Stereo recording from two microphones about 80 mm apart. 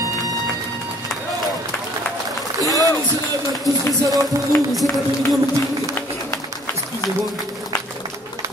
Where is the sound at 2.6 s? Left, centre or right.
Left.